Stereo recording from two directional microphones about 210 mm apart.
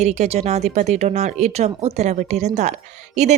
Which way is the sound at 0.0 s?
30° right (ahead or behind).